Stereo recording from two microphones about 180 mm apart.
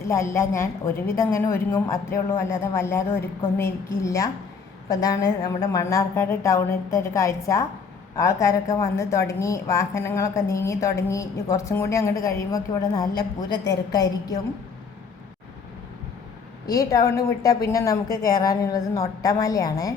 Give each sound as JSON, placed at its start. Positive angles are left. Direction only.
{"t": 0.0, "sound": "a woman's voice", "side_deg": 15}
{"t": 16.6, "sound": "a woman's voice", "side_deg": 20}